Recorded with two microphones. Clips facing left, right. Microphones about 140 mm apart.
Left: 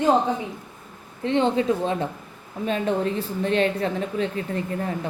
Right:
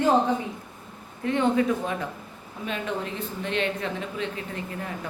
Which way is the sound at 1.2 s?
25° left (ahead or behind).